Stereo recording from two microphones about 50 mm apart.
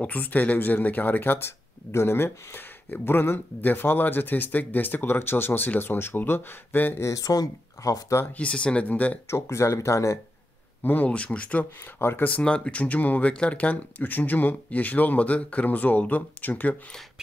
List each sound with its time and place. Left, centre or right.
0.0 s speech: left
1.9 s speech: left
7.8 s speech: left
8.3 s speech: left
9.3 s speech: left
10.8 s speech: left
11.1 s speech: left
12.0 s speech: left
12.3 s speech: left